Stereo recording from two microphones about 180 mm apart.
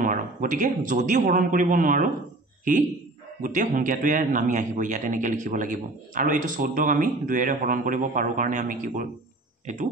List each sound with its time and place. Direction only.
0.0 s a man's voice: 45° right (ahead or behind)
3.4 s a man's voice: 45° right (ahead or behind)